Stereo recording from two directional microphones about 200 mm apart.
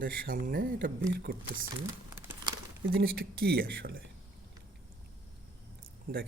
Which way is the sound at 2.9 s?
50° right (ahead or behind).